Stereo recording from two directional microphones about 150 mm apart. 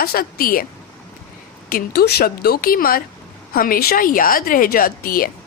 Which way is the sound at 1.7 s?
90° left.